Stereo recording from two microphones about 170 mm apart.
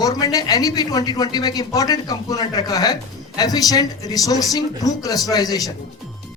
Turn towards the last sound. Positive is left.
turn(degrees=20)  # may be behind; listen again after turning